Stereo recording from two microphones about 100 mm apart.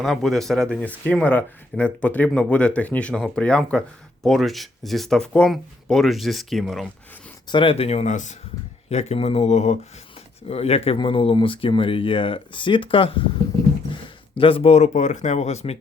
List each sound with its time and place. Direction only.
0.0 s speech: 5° left (ahead or behind)
7.5 s speech: 60° left (ahead or behind); by 10.9 s 90° left
10.9 s speech: 60° left (ahead or behind)
13.9 s a sound: 65° left (ahead or behind)
15.4 s speech: 90° left